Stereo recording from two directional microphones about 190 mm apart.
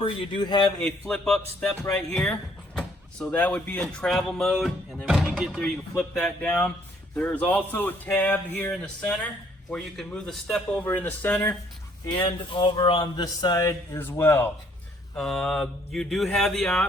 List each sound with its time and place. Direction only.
0.0 s speech: 25° left (ahead or behind)
0.8 s speech: 5° left (ahead or behind)
12.0 s speech: 25° left (ahead or behind); by 16.8 s 5° left (ahead or behind)